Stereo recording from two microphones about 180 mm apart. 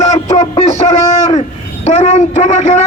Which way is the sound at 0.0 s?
40° left (ahead or behind).